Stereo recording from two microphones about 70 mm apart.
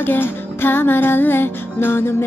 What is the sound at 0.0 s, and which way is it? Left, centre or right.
Music, left.